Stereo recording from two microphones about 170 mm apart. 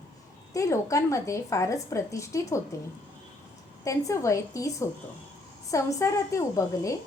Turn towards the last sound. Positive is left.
turn(degrees=20)  # may be behind; listen again after turning